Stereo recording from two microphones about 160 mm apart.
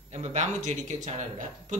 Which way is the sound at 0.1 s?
45° right (ahead or behind).